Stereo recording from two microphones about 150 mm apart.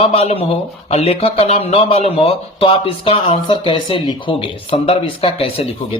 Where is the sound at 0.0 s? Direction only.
40° left (ahead or behind).